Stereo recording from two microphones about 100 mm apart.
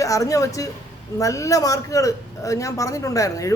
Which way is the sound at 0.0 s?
35° left (ahead or behind).